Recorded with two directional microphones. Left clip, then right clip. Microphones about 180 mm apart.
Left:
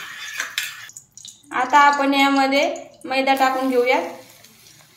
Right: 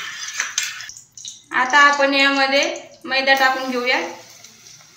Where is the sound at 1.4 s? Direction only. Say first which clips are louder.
Right 1 dB; 55° left (ahead or behind).